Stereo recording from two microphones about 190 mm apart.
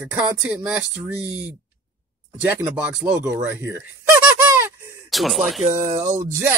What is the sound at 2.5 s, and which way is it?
A woman's voice, 10° right (ahead or behind).